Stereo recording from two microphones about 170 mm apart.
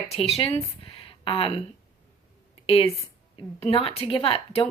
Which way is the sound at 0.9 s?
30° left (ahead or behind).